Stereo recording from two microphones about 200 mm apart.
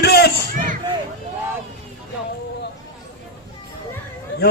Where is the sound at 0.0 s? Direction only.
55° left (ahead or behind).